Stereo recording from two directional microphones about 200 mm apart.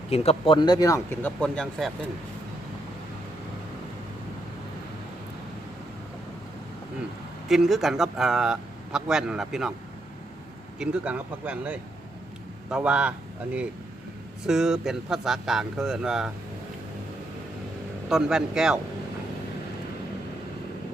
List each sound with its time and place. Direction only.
0.1 s speech: 30° left (ahead or behind); by 1.9 s 5° left (ahead or behind)
7.4 s speech: centre (ahead or behind)
10.8 s speech: 5° right (ahead or behind)
18.1 s speech: 5° right (ahead or behind)